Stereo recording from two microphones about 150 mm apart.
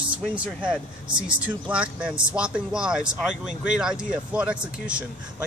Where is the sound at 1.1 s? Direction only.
30° right (ahead or behind).